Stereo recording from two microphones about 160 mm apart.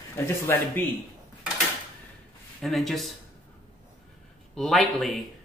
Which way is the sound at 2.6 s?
Centre (ahead or behind).